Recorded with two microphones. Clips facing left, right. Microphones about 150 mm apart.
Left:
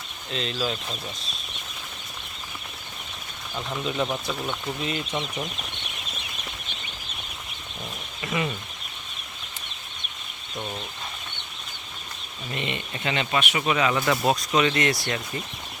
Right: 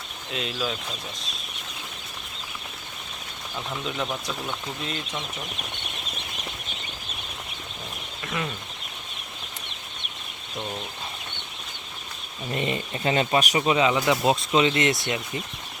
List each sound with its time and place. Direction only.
0.3 s speech: 5° right (ahead or behind)
3.5 s speech: centre (ahead or behind)
8.2 s speech: 5° left (ahead or behind)
12.5 s speech: 35° right (ahead or behind)
13.6 s speech: 25° right (ahead or behind)
13.9 s speech: 15° right (ahead or behind)